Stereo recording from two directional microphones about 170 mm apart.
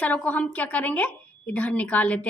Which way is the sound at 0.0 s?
10° left (ahead or behind).